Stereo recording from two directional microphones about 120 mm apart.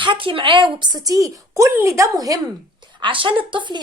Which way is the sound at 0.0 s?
45° right (ahead or behind).